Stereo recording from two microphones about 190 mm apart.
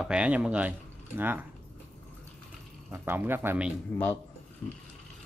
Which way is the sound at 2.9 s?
10° right (ahead or behind).